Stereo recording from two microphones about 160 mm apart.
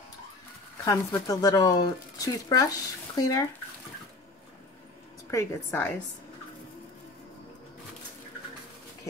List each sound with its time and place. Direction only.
0.8 s speech: 20° left (ahead or behind)
5.3 s a woman's voice: 20° left (ahead or behind)